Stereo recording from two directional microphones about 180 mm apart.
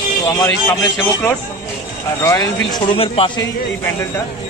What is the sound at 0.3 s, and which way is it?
A man's voice, 15° left (ahead or behind).